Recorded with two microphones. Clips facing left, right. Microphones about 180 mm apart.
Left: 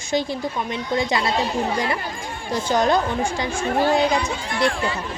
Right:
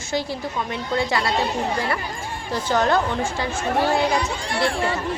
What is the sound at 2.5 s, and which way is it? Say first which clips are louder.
Speech: left 1 dB; 15° left (ahead or behind).